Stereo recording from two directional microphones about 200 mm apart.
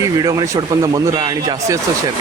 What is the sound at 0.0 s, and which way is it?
Speech, 15° right (ahead or behind).